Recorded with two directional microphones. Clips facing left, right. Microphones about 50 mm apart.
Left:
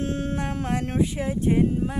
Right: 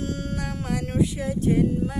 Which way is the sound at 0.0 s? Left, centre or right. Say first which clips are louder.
Left 3 dB; left.